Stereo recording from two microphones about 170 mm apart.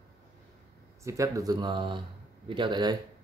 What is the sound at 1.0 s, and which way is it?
Speech, 20° right (ahead or behind).